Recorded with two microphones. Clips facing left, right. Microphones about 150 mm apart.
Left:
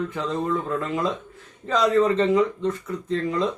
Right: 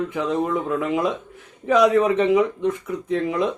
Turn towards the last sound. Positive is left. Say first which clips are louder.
# right 2 dB
turn(degrees=-15)  # may be behind; listen again after turning